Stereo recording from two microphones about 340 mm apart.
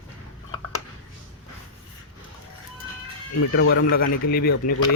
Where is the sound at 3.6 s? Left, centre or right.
Left.